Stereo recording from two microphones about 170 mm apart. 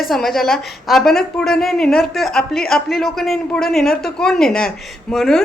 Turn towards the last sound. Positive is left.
turn(degrees=0)  # may be behind; listen again after turning